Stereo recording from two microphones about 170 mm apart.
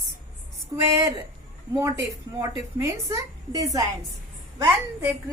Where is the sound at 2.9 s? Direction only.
20° right (ahead or behind).